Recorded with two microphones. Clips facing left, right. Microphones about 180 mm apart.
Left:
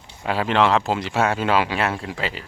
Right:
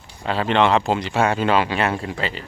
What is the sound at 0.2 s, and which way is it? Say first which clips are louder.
Speech: right 1 dB; 5° left (ahead or behind).